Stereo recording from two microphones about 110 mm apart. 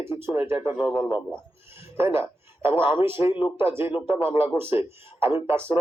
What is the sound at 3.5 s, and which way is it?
Speech, 20° right (ahead or behind).